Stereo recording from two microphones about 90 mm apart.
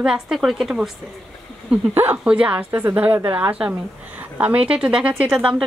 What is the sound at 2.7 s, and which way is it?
A woman's voice, 30° right (ahead or behind).